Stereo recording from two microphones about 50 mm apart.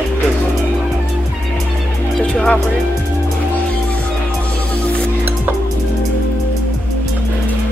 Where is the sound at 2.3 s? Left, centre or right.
Centre.